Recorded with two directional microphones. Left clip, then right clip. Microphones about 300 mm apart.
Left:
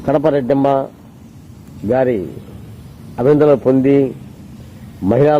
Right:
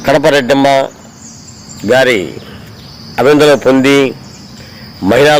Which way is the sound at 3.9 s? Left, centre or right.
Right.